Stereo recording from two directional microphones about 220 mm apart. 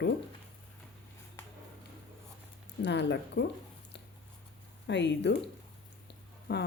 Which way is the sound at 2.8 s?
55° left (ahead or behind).